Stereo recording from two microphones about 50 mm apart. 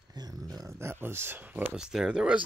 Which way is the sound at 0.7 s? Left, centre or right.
Right.